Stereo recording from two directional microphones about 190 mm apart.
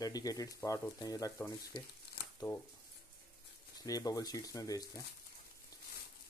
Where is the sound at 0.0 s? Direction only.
20° left (ahead or behind).